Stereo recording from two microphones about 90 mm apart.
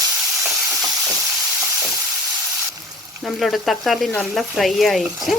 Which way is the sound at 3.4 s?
Centre (ahead or behind).